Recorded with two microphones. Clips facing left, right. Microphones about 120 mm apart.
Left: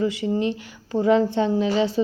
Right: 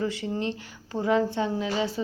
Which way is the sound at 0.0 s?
15° left (ahead or behind).